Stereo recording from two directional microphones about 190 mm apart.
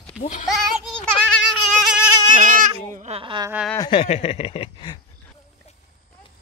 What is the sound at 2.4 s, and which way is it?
Goat, 45° right (ahead or behind).